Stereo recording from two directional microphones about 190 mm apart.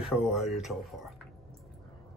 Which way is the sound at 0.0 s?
5° right (ahead or behind).